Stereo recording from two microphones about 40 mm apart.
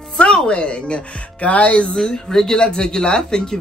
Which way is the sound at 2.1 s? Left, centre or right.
Centre.